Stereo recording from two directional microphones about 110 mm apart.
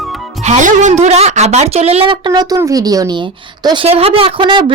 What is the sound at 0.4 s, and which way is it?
Speech, 90° right.